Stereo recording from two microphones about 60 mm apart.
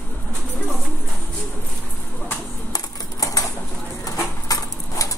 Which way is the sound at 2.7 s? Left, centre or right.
Left.